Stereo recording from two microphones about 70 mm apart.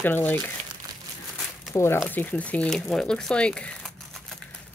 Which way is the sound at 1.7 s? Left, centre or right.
Left.